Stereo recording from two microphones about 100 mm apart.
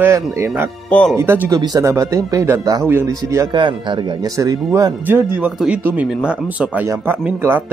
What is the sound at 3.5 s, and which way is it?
Speech, 55° right (ahead or behind).